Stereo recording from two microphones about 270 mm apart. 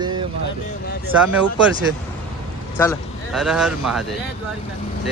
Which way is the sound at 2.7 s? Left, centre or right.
Centre.